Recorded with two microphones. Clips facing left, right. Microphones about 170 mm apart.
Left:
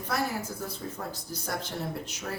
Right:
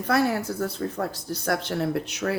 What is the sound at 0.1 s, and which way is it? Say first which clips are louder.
Speech: right 8 dB; 70° right (ahead or behind).